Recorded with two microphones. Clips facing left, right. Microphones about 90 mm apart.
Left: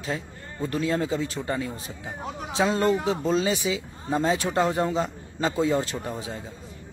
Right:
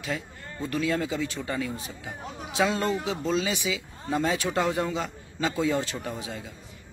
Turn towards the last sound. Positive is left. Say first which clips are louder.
# left 2 dB
turn(degrees=30)  # may be behind; listen again after turning